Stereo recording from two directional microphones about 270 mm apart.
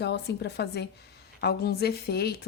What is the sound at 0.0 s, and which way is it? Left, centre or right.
A woman's voice, left.